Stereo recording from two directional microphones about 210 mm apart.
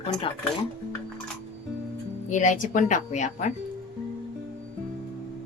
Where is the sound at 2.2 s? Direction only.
35° left (ahead or behind).